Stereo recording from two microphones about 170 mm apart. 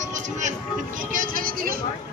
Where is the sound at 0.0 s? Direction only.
45° right (ahead or behind).